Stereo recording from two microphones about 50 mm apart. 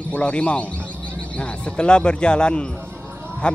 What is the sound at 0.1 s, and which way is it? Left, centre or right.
A man's voice, left.